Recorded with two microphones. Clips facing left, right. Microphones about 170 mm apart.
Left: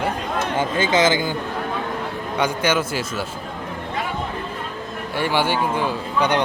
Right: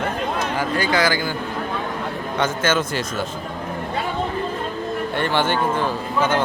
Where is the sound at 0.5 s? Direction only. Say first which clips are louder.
Left 3 dB; 20° left (ahead or behind).